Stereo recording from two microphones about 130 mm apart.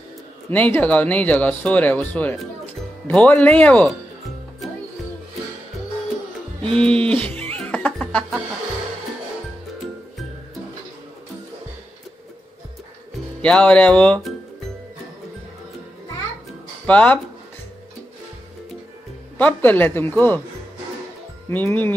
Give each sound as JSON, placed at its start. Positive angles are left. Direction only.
{"t": 0.5, "sound": "speech", "side_deg": 15}
{"t": 3.3, "sound": "speech", "side_deg": 10}
{"t": 6.7, "sound": "speech", "side_deg": 5}
{"t": 7.1, "sound": "speech", "side_deg": -45}
{"t": 7.3, "sound": "music", "side_deg": 10}
{"t": 13.4, "sound": "speech", "side_deg": 10}
{"t": 16.8, "sound": "speech", "side_deg": 10}
{"t": 19.3, "sound": "speech", "side_deg": 10}
{"t": 21.5, "sound": "speech", "side_deg": 15}